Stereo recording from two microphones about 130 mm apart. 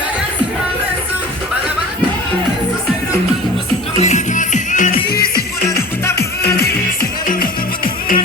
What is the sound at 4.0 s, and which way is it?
Music, 65° left (ahead or behind).